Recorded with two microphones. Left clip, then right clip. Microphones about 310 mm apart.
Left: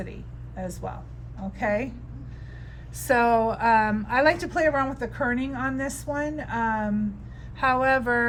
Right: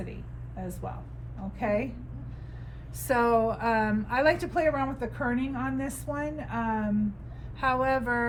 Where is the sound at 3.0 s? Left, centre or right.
Centre.